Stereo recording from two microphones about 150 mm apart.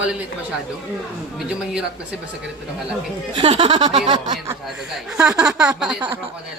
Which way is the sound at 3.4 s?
35° right (ahead or behind).